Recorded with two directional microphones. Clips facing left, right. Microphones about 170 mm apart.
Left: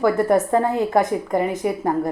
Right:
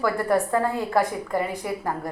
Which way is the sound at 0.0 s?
20° left (ahead or behind).